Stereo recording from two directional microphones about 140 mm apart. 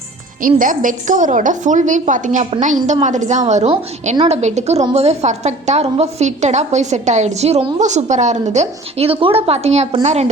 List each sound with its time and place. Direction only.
0.4 s a woman's voice: 70° right (ahead or behind); by 10.2 s 50° right (ahead or behind)